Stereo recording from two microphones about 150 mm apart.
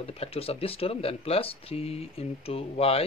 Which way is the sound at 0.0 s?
40° left (ahead or behind).